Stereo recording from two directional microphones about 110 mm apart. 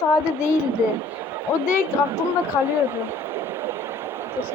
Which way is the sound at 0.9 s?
20° right (ahead or behind).